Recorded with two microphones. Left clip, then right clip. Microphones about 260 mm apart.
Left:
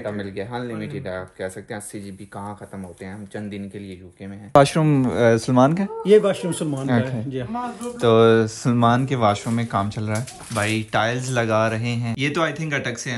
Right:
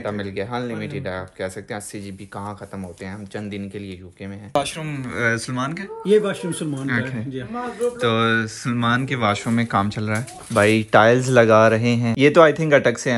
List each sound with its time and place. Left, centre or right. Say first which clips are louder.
0.0 s speech: right 2 dB; centre
3.3 s speech: right 2 dB; centre
4.6 s speech: left 9 dB; left
6.0 s speech: left 2 dB; centre
8.0 s speech: left 6 dB; centre